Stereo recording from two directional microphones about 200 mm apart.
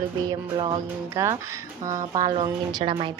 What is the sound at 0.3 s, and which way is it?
Speech, 20° right (ahead or behind).